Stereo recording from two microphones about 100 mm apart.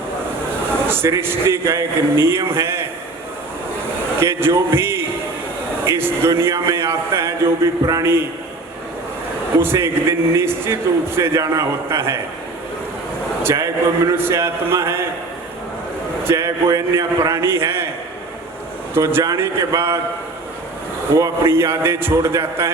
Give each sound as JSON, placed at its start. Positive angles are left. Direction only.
{"t": 0.9, "sound": "a man's voice", "side_deg": -25}
{"t": 4.2, "sound": "a man's voice", "side_deg": -25}
{"t": 9.6, "sound": "a man's voice", "side_deg": -25}
{"t": 13.4, "sound": "a man's voice", "side_deg": -30}
{"t": 16.2, "sound": "a man's voice", "side_deg": -30}
{"t": 18.9, "sound": "a man's voice", "side_deg": -25}
{"t": 21.1, "sound": "a man's voice", "side_deg": -25}